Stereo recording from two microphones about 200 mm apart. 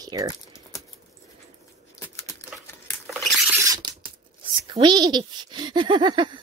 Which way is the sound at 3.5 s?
15° right (ahead or behind).